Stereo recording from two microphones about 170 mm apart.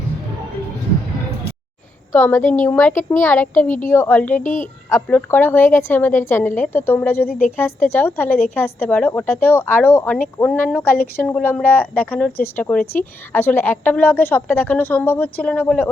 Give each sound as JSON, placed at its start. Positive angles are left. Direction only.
{"t": 2.1, "sound": "a woman's voice", "side_deg": 10}
{"t": 3.6, "sound": "a woman's voice", "side_deg": 50}
{"t": 3.8, "sound": "a woman's voice", "side_deg": 10}
{"t": 4.4, "sound": "a woman's voice", "side_deg": 50}
{"t": 4.9, "sound": "a woman's voice", "side_deg": 10}